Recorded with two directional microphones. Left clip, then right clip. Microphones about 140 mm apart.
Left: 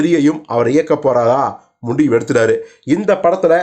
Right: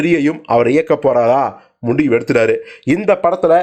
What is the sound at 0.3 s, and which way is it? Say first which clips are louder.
Speech: right 1 dB; 20° right (ahead or behind).